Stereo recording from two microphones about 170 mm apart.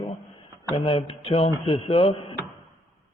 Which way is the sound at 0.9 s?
35° left (ahead or behind).